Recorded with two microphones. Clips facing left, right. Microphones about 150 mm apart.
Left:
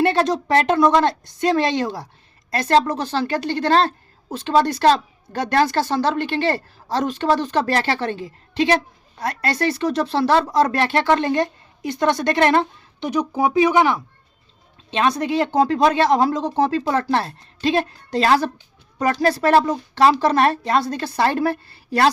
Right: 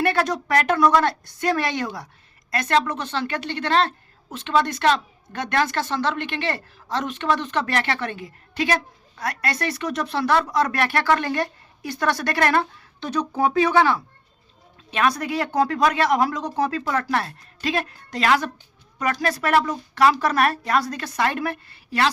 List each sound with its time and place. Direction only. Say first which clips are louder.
0.0 s a woman's voice: left 4 dB; 25° left (ahead or behind)